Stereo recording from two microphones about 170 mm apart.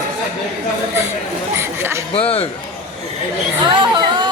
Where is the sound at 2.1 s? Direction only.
35° left (ahead or behind).